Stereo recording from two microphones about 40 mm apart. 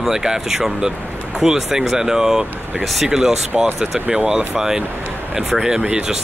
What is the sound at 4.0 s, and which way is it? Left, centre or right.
Speech, right.